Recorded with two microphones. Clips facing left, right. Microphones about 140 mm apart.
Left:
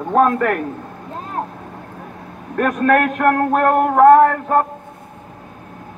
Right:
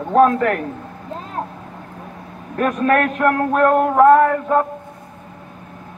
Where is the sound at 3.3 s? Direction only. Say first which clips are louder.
Even; 45° left (ahead or behind).